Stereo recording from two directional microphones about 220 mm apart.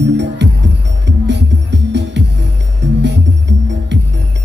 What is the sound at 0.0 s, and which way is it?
Music, 50° right (ahead or behind).